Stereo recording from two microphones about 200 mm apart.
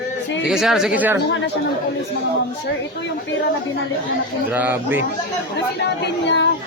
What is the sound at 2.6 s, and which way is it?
Speech, 60° left (ahead or behind).